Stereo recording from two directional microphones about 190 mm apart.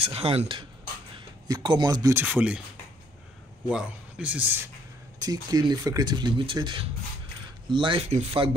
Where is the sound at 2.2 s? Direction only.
5° right (ahead or behind).